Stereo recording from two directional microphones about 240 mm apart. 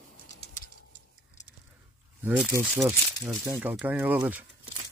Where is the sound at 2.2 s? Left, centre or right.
Centre.